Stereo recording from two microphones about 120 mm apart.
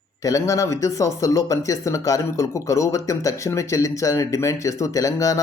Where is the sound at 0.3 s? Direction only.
25° left (ahead or behind).